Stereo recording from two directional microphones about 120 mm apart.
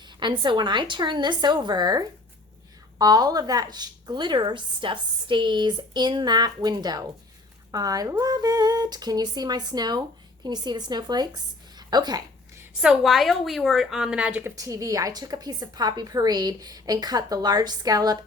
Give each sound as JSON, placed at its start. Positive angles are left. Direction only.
{"t": 0.2, "sound": "a woman's voice", "side_deg": -40}
{"t": 12.8, "sound": "speech", "side_deg": -5}
{"t": 14.5, "sound": "a woman's voice", "side_deg": -30}